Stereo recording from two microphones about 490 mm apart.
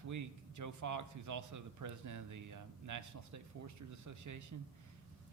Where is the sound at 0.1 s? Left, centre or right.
Right.